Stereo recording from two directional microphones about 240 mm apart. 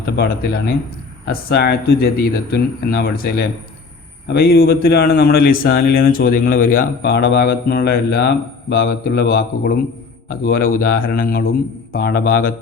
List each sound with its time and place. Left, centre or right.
1.3 s speech: left